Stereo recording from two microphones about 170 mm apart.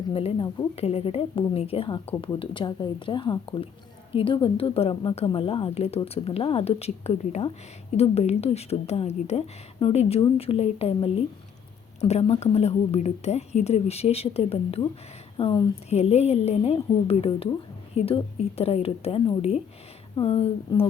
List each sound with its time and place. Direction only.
0.1 s a woman's voice: 35° left (ahead or behind)